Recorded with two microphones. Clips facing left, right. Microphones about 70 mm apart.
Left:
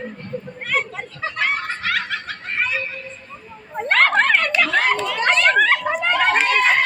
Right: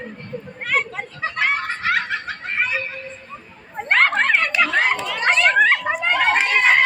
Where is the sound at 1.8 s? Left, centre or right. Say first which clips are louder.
Right 2 dB; centre.